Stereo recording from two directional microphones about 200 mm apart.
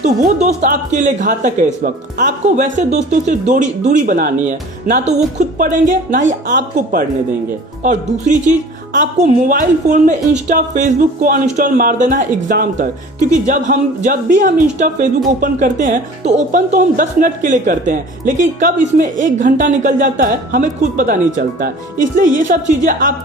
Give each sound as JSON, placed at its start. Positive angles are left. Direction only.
{"t": 0.0, "sound": "speech", "side_deg": -35}